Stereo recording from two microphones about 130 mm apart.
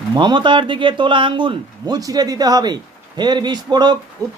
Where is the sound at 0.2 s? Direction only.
35° right (ahead or behind).